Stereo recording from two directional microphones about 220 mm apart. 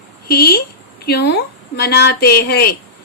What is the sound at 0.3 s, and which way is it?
A woman's voice, 45° left (ahead or behind).